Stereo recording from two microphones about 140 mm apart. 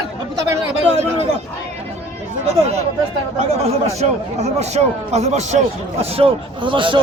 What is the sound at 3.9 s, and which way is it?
A man's voice, 50° right (ahead or behind).